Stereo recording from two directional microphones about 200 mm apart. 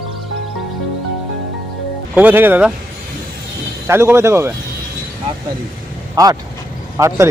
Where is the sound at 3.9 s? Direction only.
10° right (ahead or behind).